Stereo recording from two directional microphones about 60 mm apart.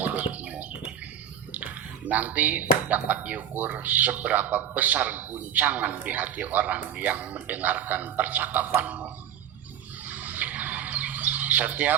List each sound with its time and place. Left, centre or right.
0.0 s bird: right
1.5 s speech: right
10.1 s bird: right